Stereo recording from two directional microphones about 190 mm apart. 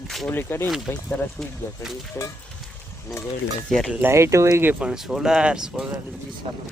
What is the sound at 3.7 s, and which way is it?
Speech, centre (ahead or behind).